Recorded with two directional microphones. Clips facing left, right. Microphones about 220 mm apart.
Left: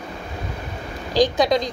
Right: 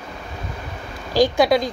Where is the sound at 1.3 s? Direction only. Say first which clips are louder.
Right 2 dB; 10° right (ahead or behind).